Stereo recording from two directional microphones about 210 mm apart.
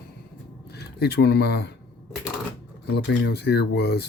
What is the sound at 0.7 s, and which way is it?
Speech, 50° left (ahead or behind).